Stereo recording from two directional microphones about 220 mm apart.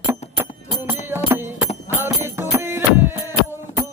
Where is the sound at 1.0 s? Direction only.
10° right (ahead or behind).